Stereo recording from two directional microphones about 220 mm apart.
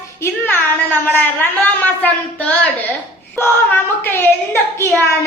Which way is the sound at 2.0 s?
5° left (ahead or behind).